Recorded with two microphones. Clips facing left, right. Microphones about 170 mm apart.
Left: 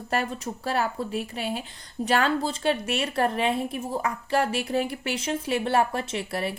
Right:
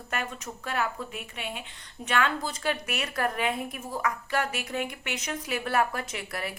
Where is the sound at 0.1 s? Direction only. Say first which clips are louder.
Left 6 dB; 35° left (ahead or behind).